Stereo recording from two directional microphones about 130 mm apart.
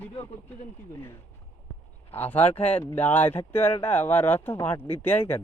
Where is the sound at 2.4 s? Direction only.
55° left (ahead or behind).